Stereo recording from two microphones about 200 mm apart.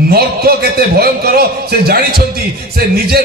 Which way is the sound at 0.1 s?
50° right (ahead or behind).